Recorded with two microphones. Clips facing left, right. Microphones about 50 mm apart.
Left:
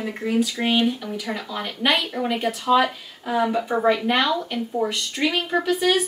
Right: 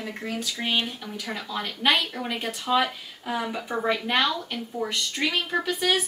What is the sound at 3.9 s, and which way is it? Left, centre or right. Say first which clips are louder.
Speech: left 4 dB; centre.